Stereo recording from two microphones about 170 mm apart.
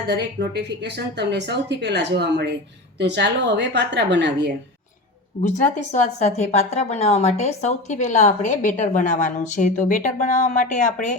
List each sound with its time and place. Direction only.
0.1 s a woman's voice: 80° right
5.4 s a woman's voice: 45° left (ahead or behind)